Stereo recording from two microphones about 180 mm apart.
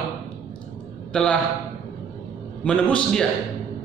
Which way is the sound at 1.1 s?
5° left (ahead or behind).